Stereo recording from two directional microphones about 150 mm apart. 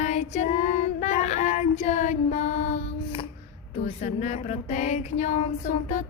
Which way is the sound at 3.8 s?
45° left (ahead or behind).